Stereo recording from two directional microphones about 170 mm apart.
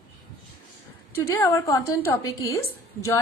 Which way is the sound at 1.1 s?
15° left (ahead or behind).